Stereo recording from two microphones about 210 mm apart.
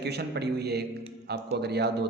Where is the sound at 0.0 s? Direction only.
50° right (ahead or behind).